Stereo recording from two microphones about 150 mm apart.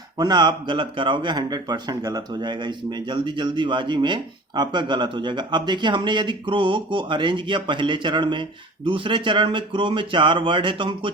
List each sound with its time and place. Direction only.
0.2 s speech: 30° right (ahead or behind)